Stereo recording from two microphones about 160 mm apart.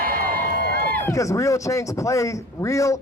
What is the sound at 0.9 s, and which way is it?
A man's voice, 15° left (ahead or behind).